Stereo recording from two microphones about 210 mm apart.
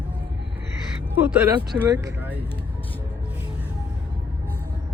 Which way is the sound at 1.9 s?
15° right (ahead or behind).